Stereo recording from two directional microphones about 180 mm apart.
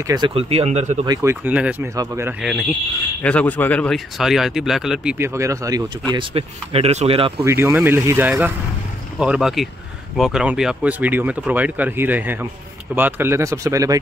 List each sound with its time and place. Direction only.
0.0 s speech: 25° right (ahead or behind); by 1.0 s 40° right (ahead or behind)
1.0 s speech: 20° right (ahead or behind)
3.2 s speech: 10° left (ahead or behind); by 5.9 s 15° right (ahead or behind)
6.1 s speech: 35° right (ahead or behind)
7.4 s speech: 15° right (ahead or behind)